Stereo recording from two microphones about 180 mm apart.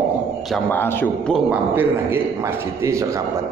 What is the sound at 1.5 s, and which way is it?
A man's voice, 10° right (ahead or behind).